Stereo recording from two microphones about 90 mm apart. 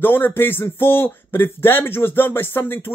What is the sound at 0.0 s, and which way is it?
Speech, 25° left (ahead or behind).